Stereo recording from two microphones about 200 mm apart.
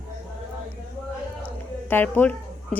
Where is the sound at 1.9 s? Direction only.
10° left (ahead or behind).